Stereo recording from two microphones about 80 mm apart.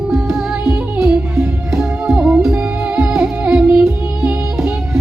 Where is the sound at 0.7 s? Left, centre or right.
Right.